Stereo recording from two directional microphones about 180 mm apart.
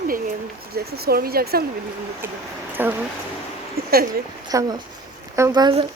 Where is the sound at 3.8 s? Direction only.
55° right (ahead or behind).